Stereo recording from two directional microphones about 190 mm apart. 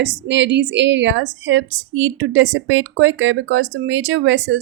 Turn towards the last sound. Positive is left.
turn(degrees=-75)  # may be behind; listen again after turning